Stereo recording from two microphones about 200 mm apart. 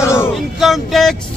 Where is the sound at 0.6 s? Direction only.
Centre (ahead or behind).